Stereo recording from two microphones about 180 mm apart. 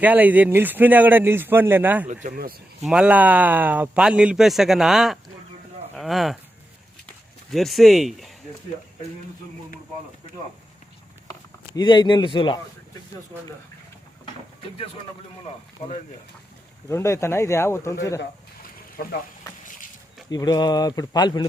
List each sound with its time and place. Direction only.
0.0 s a man's voice: 10° right (ahead or behind)
2.0 s speech: 40° right (ahead or behind)
2.8 s a man's voice: 5° right (ahead or behind)
7.5 s a man's voice: centre (ahead or behind)
11.7 s speech: 25° left (ahead or behind)
16.9 s speech: 15° left (ahead or behind)
20.3 s speech: 20° left (ahead or behind)